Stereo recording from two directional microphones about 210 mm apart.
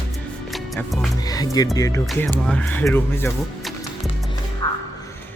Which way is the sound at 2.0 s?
5° left (ahead or behind).